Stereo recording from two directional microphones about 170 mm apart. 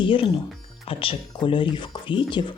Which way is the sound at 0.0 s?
30° left (ahead or behind).